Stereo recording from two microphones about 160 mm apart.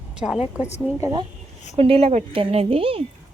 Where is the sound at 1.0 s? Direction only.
30° right (ahead or behind).